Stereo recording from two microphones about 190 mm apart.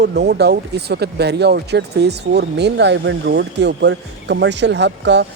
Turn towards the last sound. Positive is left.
turn(degrees=-65)  # may be behind; listen again after turning